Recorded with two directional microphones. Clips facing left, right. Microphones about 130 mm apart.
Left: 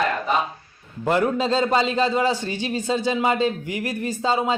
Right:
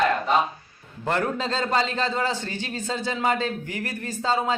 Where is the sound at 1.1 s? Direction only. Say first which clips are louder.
Left 5 dB; 15° left (ahead or behind).